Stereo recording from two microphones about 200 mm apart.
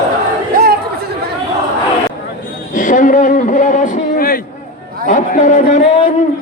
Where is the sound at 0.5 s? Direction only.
50° right (ahead or behind).